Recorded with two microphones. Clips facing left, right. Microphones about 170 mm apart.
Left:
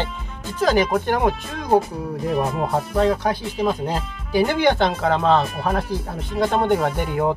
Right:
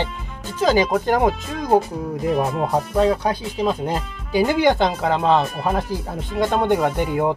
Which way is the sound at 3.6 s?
15° right (ahead or behind).